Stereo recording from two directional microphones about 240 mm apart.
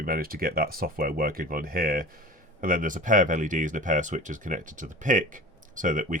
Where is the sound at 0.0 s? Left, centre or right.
Right.